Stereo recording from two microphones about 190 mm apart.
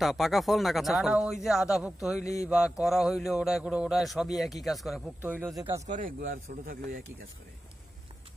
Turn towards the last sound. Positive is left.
turn(degrees=-50)  # may be behind; listen again after turning